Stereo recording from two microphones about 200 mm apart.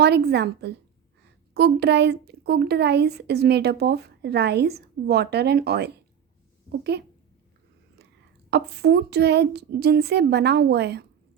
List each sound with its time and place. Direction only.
0.0 s speech: 55° right (ahead or behind)
8.4 s speech: 55° right (ahead or behind)